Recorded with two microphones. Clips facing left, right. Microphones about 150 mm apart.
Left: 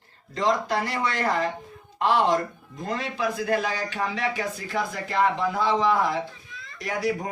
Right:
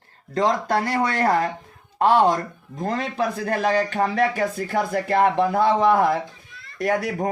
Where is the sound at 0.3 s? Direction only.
50° right (ahead or behind).